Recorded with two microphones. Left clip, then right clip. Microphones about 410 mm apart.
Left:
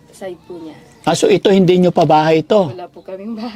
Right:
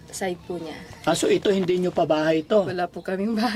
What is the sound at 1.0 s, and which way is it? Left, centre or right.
Speech, left.